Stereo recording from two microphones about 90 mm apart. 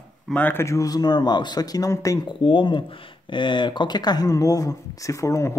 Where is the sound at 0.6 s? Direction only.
35° left (ahead or behind).